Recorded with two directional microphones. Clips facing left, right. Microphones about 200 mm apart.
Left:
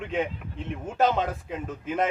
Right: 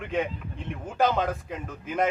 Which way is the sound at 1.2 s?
25° left (ahead or behind).